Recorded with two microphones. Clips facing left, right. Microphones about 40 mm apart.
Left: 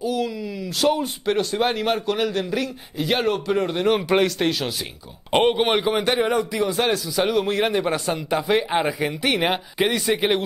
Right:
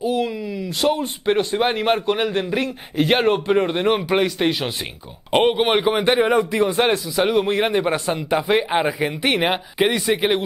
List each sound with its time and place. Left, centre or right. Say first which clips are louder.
0.0 s speech: right 3 dB; right
4.1 s speech: even; centre
4.5 s speech: right 2 dB; centre
5.3 s speech: right 2 dB; centre; by 7.0 s right
7.2 s speech: right 2 dB; centre